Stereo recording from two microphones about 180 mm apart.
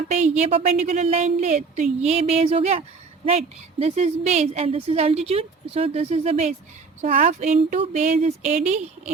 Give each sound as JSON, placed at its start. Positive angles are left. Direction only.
{"t": 0.1, "sound": "a woman's voice", "side_deg": -40}